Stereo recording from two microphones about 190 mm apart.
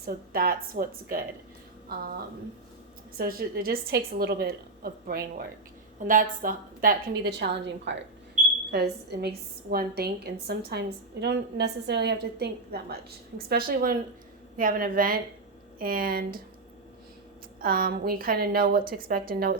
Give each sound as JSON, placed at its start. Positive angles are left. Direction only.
{"t": 0.0, "sound": "a woman's voice", "side_deg": -50}
{"t": 3.2, "sound": "a woman's voice", "side_deg": -50}
{"t": 8.7, "sound": "a woman's voice", "side_deg": -60}
{"t": 17.6, "sound": "a woman's voice", "side_deg": -50}